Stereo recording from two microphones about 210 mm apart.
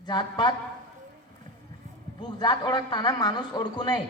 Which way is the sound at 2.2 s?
20° left (ahead or behind).